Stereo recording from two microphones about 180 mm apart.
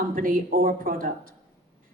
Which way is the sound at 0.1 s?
50° right (ahead or behind).